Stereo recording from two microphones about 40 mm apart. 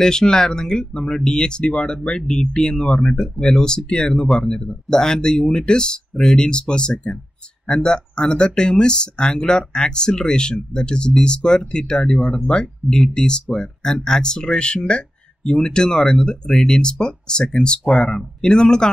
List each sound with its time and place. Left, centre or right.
0.0 s speech: centre